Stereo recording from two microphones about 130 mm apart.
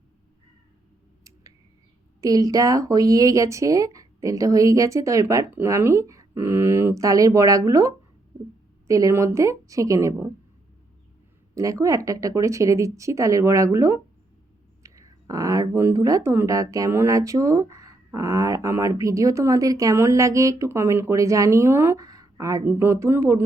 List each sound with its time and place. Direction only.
2.2 s speech: 25° right (ahead or behind)
11.5 s speech: 25° right (ahead or behind)
14.8 s a sound: 25° right (ahead or behind)
15.7 s speech: 25° right (ahead or behind)